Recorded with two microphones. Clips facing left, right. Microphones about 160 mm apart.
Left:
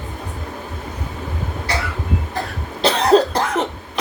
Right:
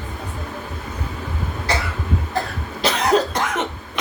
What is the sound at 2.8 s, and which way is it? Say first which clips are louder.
Cough: left 4 dB; 30° left (ahead or behind).